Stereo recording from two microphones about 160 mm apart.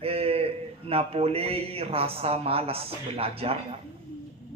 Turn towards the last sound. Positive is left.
turn(degrees=-35)  # may be behind; listen again after turning